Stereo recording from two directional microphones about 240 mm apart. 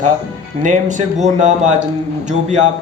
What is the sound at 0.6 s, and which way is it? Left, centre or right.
Speech, right.